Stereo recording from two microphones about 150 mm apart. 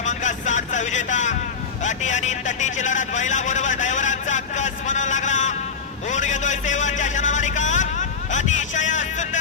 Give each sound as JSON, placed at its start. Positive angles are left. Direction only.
{"t": 0.0, "sound": "a man's voice", "side_deg": 55}
{"t": 6.1, "sound": "a sound", "side_deg": 55}
{"t": 8.3, "sound": "vehicle", "side_deg": 55}